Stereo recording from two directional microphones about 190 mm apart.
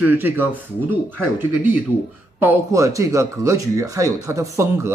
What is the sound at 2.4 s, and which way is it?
Speech, 15° right (ahead or behind).